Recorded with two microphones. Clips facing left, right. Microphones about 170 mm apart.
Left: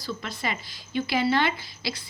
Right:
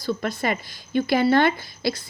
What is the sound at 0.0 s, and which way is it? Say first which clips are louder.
Speech: right 7 dB; 50° right (ahead or behind).